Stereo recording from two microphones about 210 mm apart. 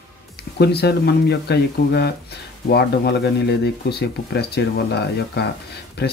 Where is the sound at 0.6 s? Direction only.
50° left (ahead or behind).